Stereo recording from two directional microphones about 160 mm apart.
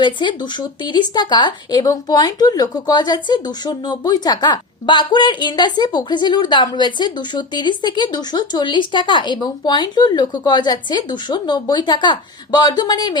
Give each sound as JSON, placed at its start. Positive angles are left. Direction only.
{"t": 0.0, "sound": "speech", "side_deg": 30}